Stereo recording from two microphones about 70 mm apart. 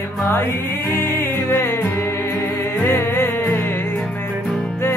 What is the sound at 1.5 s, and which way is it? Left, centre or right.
Music, left.